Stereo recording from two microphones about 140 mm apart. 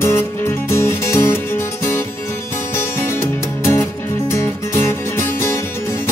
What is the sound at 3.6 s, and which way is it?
Music, 20° left (ahead or behind).